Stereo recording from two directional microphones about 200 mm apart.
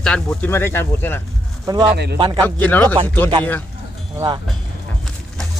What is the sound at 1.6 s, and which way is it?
Speech, 20° right (ahead or behind).